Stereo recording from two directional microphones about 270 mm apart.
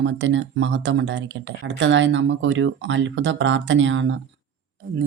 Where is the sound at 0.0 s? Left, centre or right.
Right.